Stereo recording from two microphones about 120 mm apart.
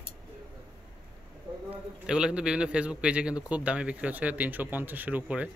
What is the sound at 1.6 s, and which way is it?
Speech, 5° right (ahead or behind).